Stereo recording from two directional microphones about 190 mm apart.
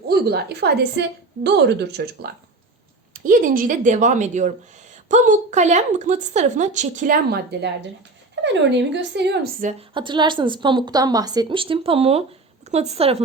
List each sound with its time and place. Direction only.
0.1 s a woman's voice: 60° right (ahead or behind)
3.2 s a woman's voice: 45° right (ahead or behind)
8.7 s a woman's voice: 65° right (ahead or behind)
9.9 s a woman's voice: 25° right (ahead or behind)